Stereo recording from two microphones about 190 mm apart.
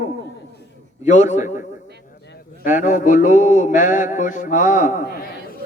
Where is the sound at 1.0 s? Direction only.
40° left (ahead or behind).